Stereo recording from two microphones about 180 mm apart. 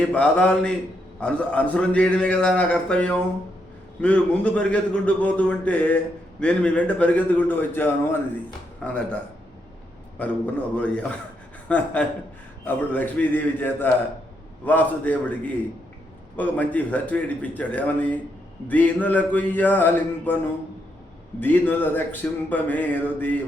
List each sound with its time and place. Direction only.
0.0 s speech: 5° left (ahead or behind)
10.2 s speech: 10° left (ahead or behind)
16.4 s speech: 10° left (ahead or behind)